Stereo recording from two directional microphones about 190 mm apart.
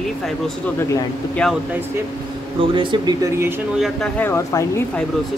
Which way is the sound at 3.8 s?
5° left (ahead or behind).